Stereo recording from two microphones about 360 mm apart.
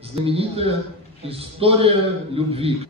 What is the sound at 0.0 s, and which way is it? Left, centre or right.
A man's voice, centre.